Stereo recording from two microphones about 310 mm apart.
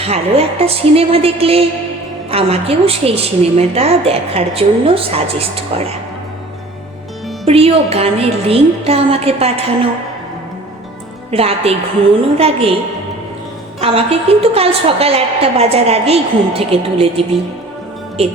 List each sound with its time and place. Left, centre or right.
0.0 s a woman's voice: centre
7.4 s a woman's voice: centre
11.3 s a woman's voice: centre
13.8 s a woman's voice: centre